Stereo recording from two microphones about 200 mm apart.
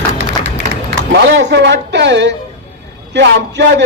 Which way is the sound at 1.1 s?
60° right (ahead or behind).